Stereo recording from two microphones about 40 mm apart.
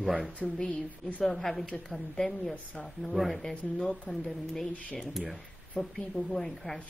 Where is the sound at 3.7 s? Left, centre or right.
Left.